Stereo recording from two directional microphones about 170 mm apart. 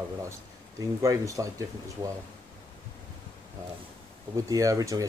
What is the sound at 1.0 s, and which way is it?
Speech, 20° right (ahead or behind).